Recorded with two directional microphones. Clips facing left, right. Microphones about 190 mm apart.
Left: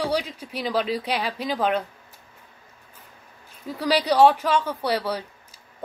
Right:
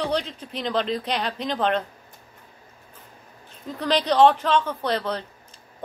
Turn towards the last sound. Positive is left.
turn(degrees=10)  # may be behind; listen again after turning